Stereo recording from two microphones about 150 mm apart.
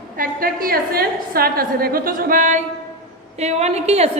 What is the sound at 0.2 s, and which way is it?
A woman's voice, 70° right (ahead or behind).